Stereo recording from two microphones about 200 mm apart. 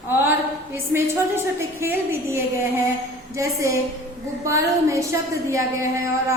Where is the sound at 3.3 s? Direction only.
15° right (ahead or behind).